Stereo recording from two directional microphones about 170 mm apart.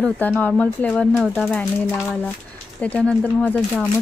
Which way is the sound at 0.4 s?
10° left (ahead or behind).